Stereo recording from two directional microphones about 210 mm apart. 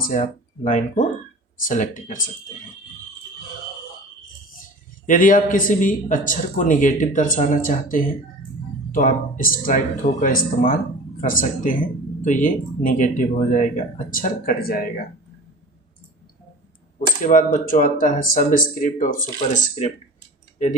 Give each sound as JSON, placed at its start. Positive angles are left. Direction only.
{"t": 0.0, "sound": "a man's voice", "side_deg": 35}
{"t": 4.6, "sound": "a man's voice", "side_deg": 40}
{"t": 17.2, "sound": "a man's voice", "side_deg": 40}